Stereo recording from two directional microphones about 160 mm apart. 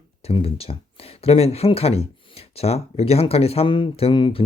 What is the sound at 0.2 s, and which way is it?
Speech, 40° left (ahead or behind).